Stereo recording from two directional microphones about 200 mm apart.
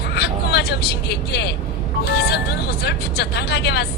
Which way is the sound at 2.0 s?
50° left (ahead or behind).